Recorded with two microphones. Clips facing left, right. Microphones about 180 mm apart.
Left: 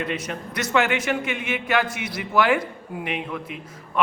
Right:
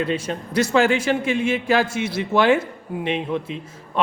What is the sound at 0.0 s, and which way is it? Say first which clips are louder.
A man's voice: right 4 dB; 30° right (ahead or behind).